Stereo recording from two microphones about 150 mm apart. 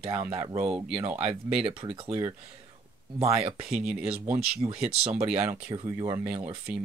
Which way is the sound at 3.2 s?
40° right (ahead or behind).